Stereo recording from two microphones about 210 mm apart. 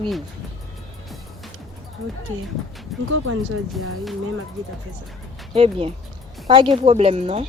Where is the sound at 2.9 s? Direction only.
Centre (ahead or behind).